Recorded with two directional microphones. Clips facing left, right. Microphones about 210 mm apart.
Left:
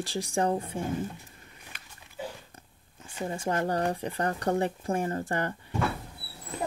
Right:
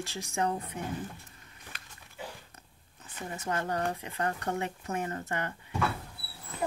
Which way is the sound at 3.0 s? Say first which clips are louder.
Left 7 dB; 30° left (ahead or behind).